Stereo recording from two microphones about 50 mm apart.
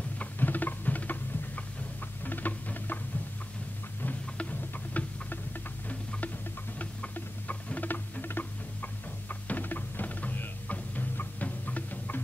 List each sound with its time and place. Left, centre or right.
0.2 s patter: left
4.0 s music: left
6.8 s rodents: left